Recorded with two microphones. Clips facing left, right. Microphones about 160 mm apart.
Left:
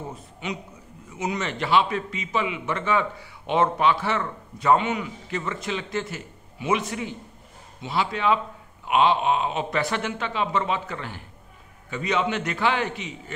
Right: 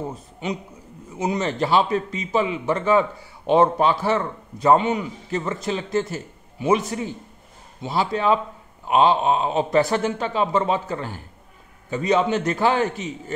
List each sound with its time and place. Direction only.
1.1 s a man's voice: 35° right (ahead or behind)